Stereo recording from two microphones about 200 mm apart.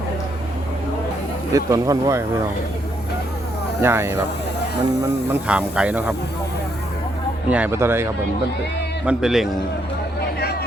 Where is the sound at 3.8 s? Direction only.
10° right (ahead or behind).